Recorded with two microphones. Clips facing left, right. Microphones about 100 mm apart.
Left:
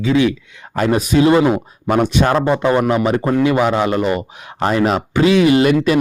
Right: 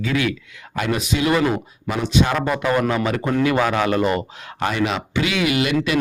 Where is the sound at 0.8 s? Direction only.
40° left (ahead or behind).